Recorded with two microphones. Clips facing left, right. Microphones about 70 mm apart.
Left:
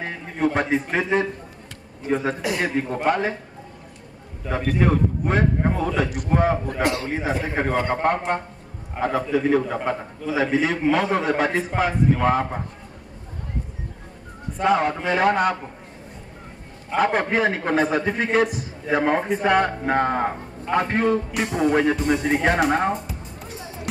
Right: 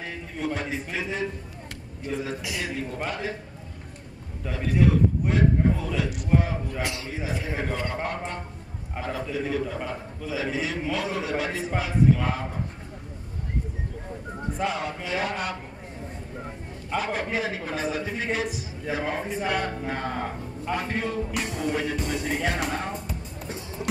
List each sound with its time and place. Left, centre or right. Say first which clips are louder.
0.0 s a man's voice: left 8 dB; left
4.5 s a man's voice: left 2 dB; left
14.6 s a man's voice: left 10 dB; left
16.9 s a man's voice: left 7 dB; left